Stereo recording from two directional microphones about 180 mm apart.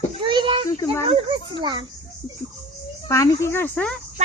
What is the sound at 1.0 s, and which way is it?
Speech, 35° right (ahead or behind).